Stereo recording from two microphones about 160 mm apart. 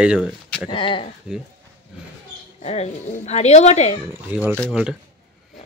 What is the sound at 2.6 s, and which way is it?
Speech, 40° left (ahead or behind).